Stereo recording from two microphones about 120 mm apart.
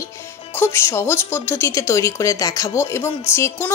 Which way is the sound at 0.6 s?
20° left (ahead or behind).